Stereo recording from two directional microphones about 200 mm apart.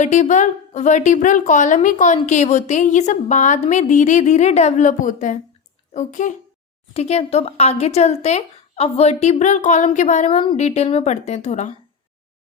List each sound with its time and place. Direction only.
0.0 s speech: 35° left (ahead or behind)